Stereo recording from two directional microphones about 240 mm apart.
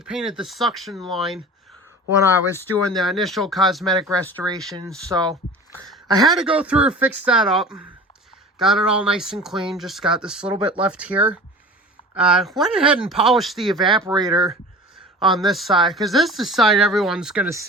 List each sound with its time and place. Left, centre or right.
0.0 s speech: centre
2.6 s speech: centre
4.4 s speech: centre
6.2 s speech: centre
13.8 s speech: centre
15.2 s speech: centre